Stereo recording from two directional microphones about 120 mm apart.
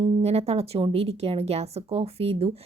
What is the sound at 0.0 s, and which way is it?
A woman's voice, 60° right (ahead or behind).